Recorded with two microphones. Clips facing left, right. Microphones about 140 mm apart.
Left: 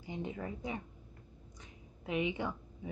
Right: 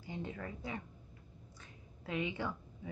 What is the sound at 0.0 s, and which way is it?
A woman's voice, 15° left (ahead or behind).